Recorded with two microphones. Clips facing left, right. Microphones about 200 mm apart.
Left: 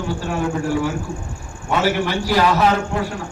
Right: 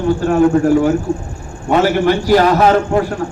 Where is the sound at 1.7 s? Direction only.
45° right (ahead or behind).